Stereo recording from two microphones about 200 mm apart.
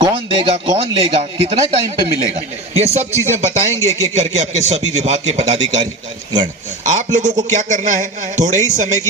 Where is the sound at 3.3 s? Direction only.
15° left (ahead or behind).